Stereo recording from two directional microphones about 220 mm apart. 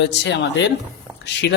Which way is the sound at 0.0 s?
55° left (ahead or behind).